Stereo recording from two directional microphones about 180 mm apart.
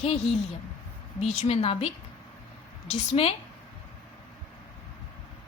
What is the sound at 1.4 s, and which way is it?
Speech, 35° left (ahead or behind).